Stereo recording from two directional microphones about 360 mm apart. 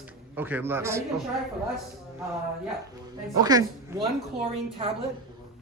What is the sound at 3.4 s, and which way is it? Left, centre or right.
Speech, centre.